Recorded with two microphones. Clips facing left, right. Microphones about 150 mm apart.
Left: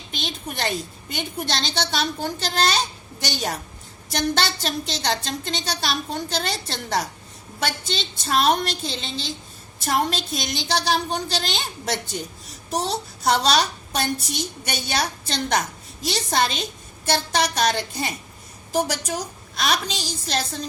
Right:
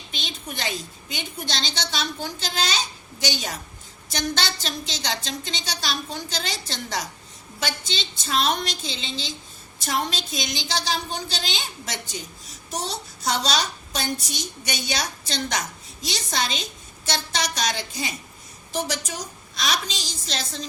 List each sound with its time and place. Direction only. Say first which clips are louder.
0.1 s a child's voice: left 4 dB; 55° left (ahead or behind)